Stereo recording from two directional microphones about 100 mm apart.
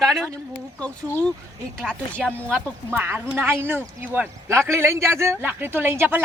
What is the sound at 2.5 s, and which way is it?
A man's voice, 20° right (ahead or behind).